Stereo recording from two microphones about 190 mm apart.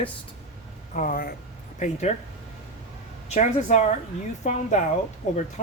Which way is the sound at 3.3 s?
40° left (ahead or behind).